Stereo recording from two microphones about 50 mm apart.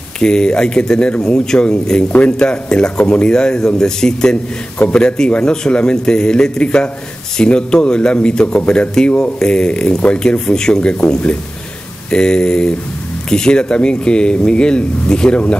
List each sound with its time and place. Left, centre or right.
0.2 s a man's voice: centre
4.7 s a man's voice: left